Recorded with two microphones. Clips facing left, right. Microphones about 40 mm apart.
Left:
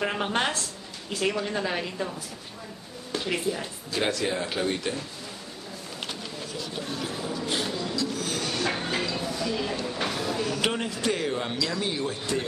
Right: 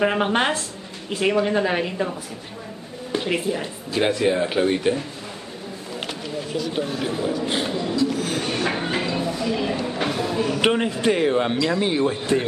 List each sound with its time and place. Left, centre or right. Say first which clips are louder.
0.0 s speech: right 7 dB; right
7.1 s speech: right 7 dB; right